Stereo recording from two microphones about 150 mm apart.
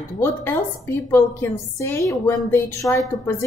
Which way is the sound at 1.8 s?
20° left (ahead or behind).